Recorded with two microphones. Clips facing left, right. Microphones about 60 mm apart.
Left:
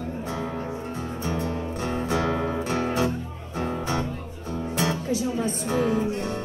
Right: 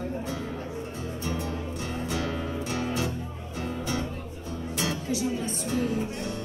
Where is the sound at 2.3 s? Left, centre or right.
Left.